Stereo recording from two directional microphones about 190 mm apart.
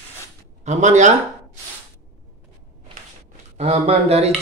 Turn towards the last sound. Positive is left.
turn(degrees=-35)  # may be behind; listen again after turning